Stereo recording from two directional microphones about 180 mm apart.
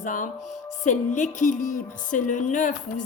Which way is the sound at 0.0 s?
45° left (ahead or behind).